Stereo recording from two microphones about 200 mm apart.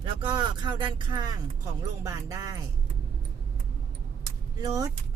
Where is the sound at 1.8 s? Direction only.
15° right (ahead or behind).